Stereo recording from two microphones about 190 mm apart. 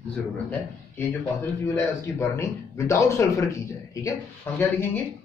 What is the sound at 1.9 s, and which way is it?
A man's voice, 15° left (ahead or behind).